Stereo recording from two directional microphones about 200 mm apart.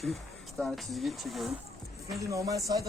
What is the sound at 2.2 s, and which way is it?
Speech, 15° right (ahead or behind).